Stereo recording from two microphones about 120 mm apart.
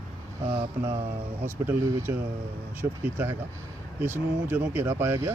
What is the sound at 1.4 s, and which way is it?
Speech, 15° right (ahead or behind).